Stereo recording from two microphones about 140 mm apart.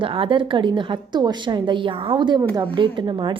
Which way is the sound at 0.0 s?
40° right (ahead or behind).